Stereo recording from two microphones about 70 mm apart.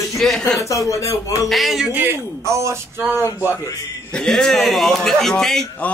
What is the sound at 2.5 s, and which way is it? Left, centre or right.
Speech, right.